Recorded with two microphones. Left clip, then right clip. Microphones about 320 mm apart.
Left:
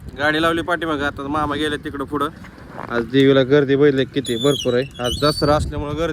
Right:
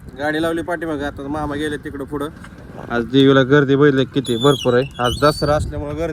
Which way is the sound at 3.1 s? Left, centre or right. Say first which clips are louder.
Right 1 dB; centre.